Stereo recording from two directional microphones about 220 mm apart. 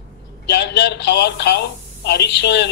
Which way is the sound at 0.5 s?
50° left (ahead or behind).